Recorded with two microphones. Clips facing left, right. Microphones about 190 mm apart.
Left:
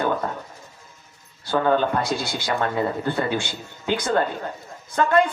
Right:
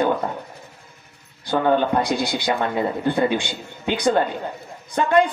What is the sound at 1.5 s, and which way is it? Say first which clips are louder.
Speech: right 1 dB; 20° right (ahead or behind).